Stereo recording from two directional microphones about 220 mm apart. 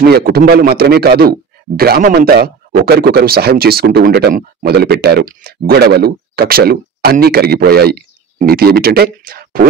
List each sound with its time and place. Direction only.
0.0 s speech: 45° right (ahead or behind)